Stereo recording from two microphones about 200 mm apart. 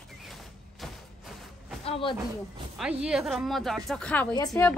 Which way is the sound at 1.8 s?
30° left (ahead or behind).